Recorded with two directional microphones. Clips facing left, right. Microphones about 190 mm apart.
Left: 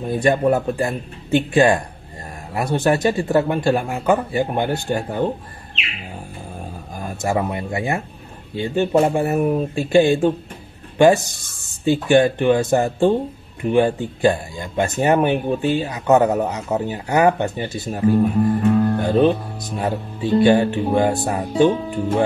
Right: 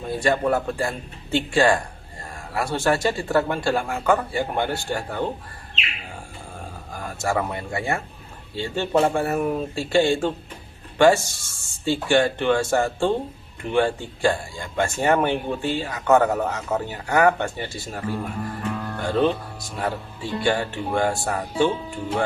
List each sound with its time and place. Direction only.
0.1 s speech: 20° left (ahead or behind)
7.0 s speech: 20° left (ahead or behind)